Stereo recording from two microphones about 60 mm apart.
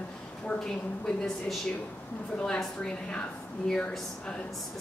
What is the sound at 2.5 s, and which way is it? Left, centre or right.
A woman's voice, centre.